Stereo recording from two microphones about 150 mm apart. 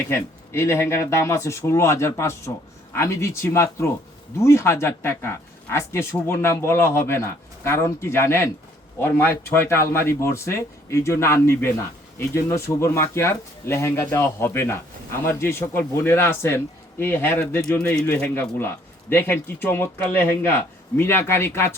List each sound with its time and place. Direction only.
0.1 s speech: 15° left (ahead or behind)